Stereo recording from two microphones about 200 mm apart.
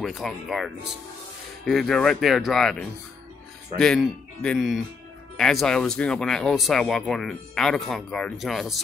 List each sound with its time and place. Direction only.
0.0 s speech: centre (ahead or behind)